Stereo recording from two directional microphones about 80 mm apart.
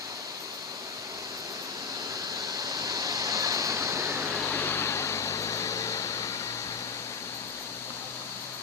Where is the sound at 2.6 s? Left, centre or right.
Right.